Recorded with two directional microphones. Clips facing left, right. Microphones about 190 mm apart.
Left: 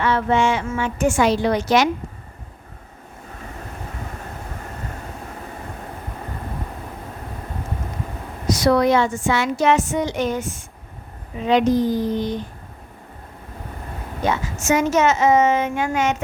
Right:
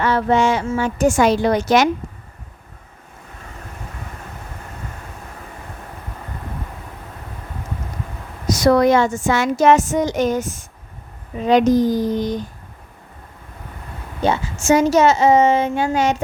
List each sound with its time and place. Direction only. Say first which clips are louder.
0.0 s a woman's voice: right 2 dB; 40° right (ahead or behind)
8.4 s a woman's voice: right 3 dB; 45° right (ahead or behind)
14.2 s a woman's voice: right 3 dB; 30° right (ahead or behind)